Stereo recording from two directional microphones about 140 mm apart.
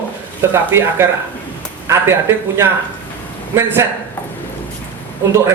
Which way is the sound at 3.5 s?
15° right (ahead or behind).